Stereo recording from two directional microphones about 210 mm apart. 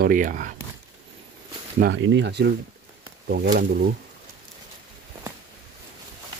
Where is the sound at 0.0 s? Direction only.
40° right (ahead or behind).